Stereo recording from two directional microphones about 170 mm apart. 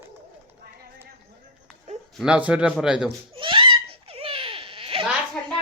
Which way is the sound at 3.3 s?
30° right (ahead or behind).